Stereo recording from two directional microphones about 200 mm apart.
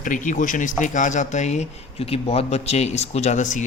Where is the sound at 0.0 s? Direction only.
40° left (ahead or behind).